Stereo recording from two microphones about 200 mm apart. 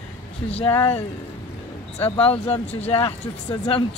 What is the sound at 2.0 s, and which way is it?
A man's voice, 30° left (ahead or behind).